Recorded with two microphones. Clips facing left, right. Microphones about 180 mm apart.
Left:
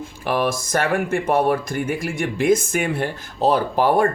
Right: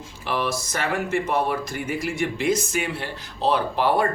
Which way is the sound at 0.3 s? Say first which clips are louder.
Left 5 dB; 50° left (ahead or behind).